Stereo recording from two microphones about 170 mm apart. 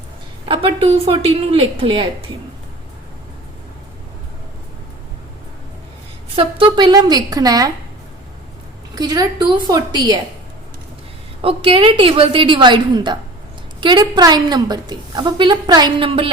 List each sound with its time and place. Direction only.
0.4 s a sound: 30° right (ahead or behind)
1.0 s a woman's voice: 35° right (ahead or behind)
6.3 s a woman's voice: 30° right (ahead or behind)
9.0 s a woman's voice: 25° right (ahead or behind)
11.4 s a woman's voice: 30° right (ahead or behind)